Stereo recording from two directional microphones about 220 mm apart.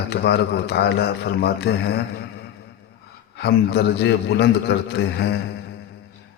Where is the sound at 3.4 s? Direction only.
45° left (ahead or behind).